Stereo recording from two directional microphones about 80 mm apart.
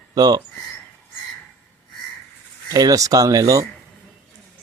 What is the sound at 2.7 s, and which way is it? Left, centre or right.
Speech, right.